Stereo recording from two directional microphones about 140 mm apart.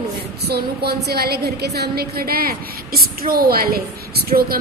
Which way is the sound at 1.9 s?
90° right.